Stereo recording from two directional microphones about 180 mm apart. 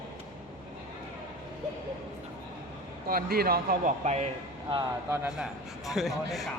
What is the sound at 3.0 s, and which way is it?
Speech, 55° right (ahead or behind).